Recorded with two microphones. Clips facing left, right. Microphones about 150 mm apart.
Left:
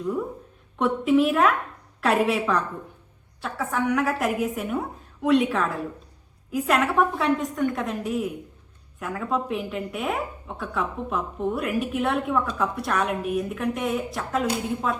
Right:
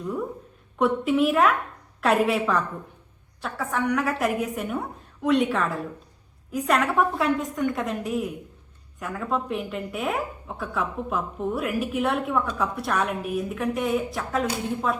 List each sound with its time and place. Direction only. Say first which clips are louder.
0.8 s a woman's voice: left 1 dB; centre (ahead or behind)